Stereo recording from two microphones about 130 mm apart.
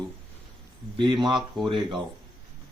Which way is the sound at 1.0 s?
35° right (ahead or behind).